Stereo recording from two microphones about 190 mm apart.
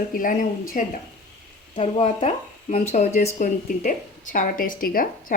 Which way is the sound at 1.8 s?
35° left (ahead or behind).